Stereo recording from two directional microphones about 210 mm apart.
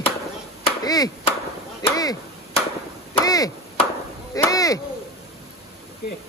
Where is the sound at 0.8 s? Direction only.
20° left (ahead or behind).